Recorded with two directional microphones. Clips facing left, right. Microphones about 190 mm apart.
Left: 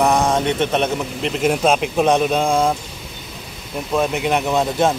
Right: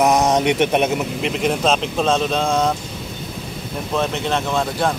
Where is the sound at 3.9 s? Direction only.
10° left (ahead or behind).